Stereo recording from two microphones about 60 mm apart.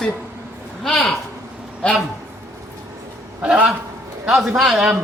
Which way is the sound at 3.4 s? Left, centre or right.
Centre.